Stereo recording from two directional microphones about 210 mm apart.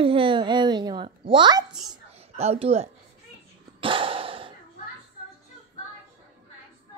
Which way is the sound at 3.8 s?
25° right (ahead or behind).